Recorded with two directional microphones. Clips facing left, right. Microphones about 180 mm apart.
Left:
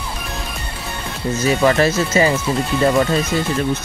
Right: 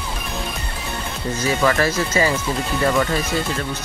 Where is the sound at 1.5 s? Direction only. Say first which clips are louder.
Left 4 dB; 25° left (ahead or behind).